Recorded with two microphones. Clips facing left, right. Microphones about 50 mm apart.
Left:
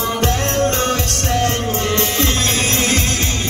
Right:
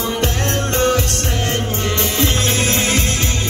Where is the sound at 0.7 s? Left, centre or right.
Left.